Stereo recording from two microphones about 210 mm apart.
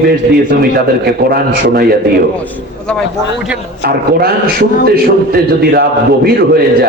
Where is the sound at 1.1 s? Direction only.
45° right (ahead or behind).